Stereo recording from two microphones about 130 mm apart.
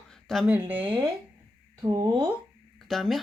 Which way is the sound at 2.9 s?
Centre (ahead or behind).